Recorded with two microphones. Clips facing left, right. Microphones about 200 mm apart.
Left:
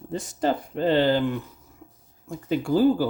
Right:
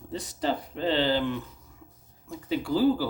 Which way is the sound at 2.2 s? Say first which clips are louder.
Left 4 dB; 50° left (ahead or behind).